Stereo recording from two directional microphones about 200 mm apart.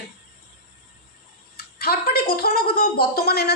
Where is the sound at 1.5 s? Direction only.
50° left (ahead or behind).